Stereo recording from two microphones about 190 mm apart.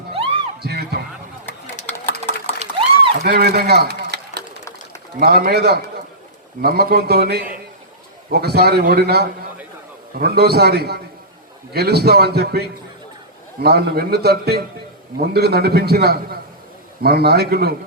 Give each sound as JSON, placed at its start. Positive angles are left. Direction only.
{"t": 0.6, "sound": "music", "side_deg": -60}
{"t": 2.6, "sound": "a sound", "side_deg": -35}
{"t": 3.2, "sound": "a man's voice", "side_deg": -55}